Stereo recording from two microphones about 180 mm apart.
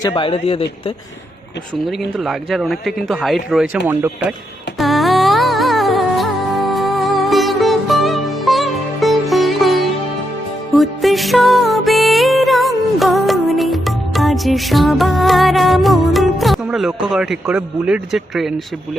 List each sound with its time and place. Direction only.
0.0 s speech: 30° left (ahead or behind)
2.1 s speech: centre (ahead or behind)
4.8 s music: centre (ahead or behind)
10.8 s music: centre (ahead or behind)
17.1 s speech: centre (ahead or behind)